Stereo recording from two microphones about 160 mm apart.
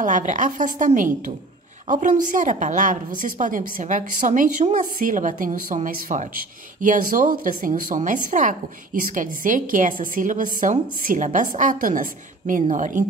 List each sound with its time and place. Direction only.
0.0 s a woman's voice: 55° right (ahead or behind)